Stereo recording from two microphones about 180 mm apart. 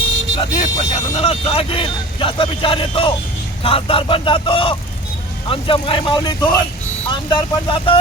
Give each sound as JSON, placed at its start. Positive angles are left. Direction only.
{"t": 0.3, "sound": "speech", "side_deg": 30}